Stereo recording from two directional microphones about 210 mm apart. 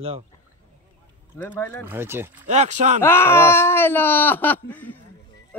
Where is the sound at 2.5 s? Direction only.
35° right (ahead or behind).